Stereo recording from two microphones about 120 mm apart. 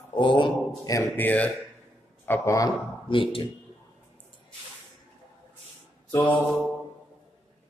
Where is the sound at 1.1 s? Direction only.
15° left (ahead or behind).